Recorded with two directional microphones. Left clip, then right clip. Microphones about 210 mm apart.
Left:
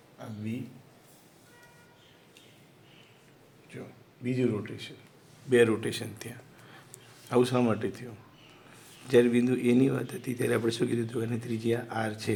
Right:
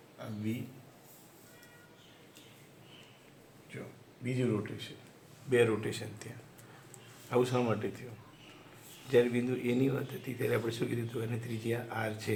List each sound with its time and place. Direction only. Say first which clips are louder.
4.2 s a man's voice: left 4 dB; 30° left (ahead or behind)
9.0 s a man's voice: left 5 dB; 45° left (ahead or behind)